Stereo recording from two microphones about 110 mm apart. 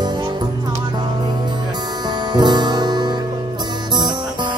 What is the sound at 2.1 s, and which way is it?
Music, 40° right (ahead or behind).